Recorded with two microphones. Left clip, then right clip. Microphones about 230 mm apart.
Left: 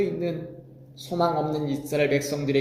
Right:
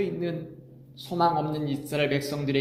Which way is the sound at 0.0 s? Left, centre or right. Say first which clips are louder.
Left 3 dB; right.